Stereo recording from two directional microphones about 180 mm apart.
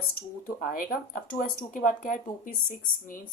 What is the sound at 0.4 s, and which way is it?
Speech, 50° left (ahead or behind).